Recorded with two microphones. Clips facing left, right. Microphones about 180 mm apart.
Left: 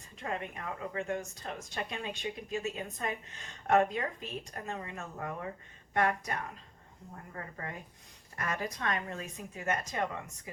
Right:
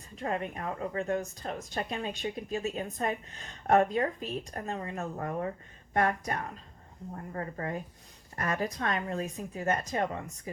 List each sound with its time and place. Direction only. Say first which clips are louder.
0.2 s a woman's voice: right 5 dB; 40° right (ahead or behind)